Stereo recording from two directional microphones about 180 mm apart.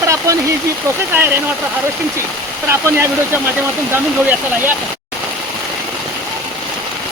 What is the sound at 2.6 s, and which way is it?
Speech, 15° right (ahead or behind).